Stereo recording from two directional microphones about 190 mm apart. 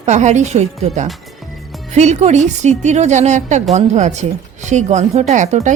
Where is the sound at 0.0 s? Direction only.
40° right (ahead or behind).